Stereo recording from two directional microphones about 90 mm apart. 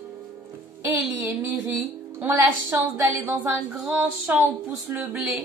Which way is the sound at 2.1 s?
25° right (ahead or behind).